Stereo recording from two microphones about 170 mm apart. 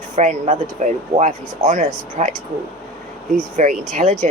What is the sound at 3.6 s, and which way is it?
Speech, 45° right (ahead or behind).